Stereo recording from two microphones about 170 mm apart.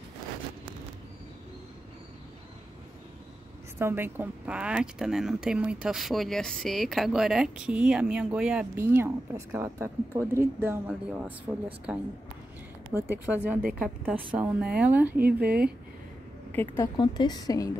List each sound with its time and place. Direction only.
3.7 s a woman's voice: 15° right (ahead or behind)
16.7 s a woman's voice: 20° left (ahead or behind)